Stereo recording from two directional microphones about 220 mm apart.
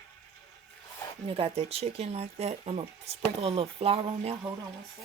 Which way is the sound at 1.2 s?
25° right (ahead or behind).